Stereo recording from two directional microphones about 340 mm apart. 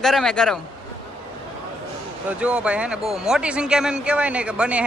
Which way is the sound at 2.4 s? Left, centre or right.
Centre.